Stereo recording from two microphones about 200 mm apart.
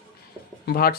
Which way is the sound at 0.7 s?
50° left (ahead or behind).